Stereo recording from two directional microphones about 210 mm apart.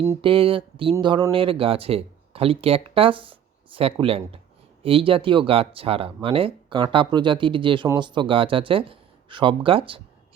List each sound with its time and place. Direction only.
0.2 s speech: 25° right (ahead or behind)